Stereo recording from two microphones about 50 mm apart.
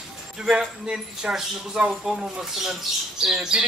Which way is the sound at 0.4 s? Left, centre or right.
Centre.